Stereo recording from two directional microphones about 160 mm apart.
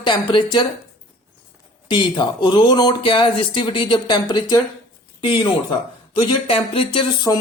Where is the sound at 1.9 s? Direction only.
30° left (ahead or behind).